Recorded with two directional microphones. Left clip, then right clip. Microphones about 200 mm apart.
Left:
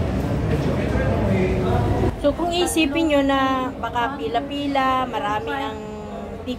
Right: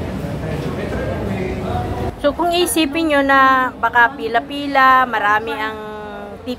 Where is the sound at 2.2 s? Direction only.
10° right (ahead or behind).